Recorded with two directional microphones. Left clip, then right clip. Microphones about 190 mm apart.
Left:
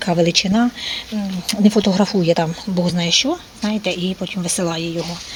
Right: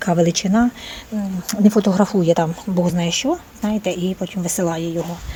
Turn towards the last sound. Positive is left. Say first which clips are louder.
# even
turn(degrees=-5)  # may be behind; listen again after turning